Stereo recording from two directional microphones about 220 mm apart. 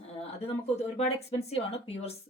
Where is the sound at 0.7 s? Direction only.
30° left (ahead or behind).